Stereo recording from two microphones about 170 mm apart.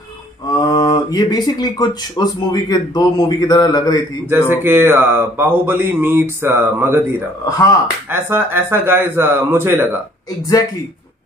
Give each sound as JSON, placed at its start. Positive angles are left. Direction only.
{"t": 0.5, "sound": "speech", "side_deg": 20}
{"t": 4.5, "sound": "speech", "side_deg": -15}
{"t": 7.4, "sound": "speech", "side_deg": 20}
{"t": 8.1, "sound": "speech", "side_deg": -10}